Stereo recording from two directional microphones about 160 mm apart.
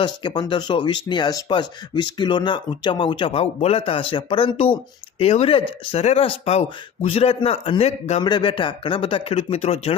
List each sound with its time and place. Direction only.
0.0 s speech: 30° left (ahead or behind)
8.2 s speech: 30° left (ahead or behind)